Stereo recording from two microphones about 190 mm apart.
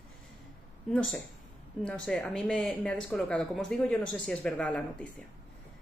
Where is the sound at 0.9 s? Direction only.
5° left (ahead or behind).